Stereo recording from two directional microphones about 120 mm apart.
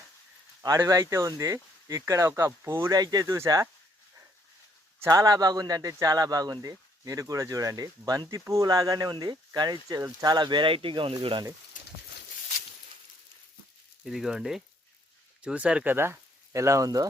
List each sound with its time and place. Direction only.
0.6 s speech: 25° right (ahead or behind)
5.0 s speech: 30° right (ahead or behind); by 11.4 s 50° right (ahead or behind)
14.0 s speech: 5° right (ahead or behind); by 17.1 s 30° right (ahead or behind)